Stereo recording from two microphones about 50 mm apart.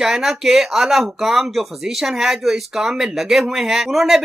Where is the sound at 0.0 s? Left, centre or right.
Centre.